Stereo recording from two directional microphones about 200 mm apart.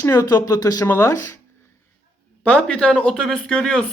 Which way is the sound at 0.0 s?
15° left (ahead or behind).